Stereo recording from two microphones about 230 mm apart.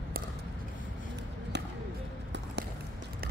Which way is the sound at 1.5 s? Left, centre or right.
Right.